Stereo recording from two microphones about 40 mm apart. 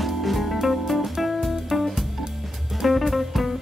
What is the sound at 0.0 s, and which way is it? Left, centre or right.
Music, centre.